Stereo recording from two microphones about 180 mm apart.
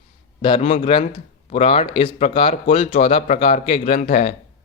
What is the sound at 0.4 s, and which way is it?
A man's voice, 30° left (ahead or behind).